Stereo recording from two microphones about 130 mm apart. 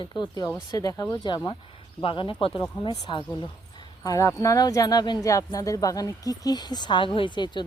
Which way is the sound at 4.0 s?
25° left (ahead or behind).